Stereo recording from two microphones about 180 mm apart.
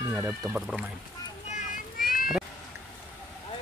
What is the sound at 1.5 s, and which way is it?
Children playing, 50° left (ahead or behind).